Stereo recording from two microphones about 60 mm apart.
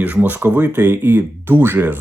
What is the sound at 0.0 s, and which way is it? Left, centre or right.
Speech, right.